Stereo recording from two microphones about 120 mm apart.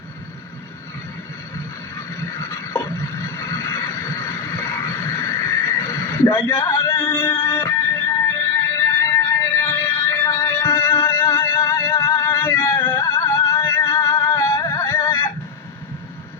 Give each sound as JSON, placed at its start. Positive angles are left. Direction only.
{"t": 2.3, "sound": "a sound", "side_deg": 25}
{"t": 3.2, "sound": "neigh", "side_deg": 25}
{"t": 7.1, "sound": "music", "side_deg": 25}
{"t": 8.7, "sound": "music", "side_deg": 25}